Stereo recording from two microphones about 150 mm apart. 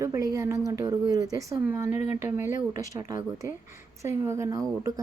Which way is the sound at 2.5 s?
55° left (ahead or behind).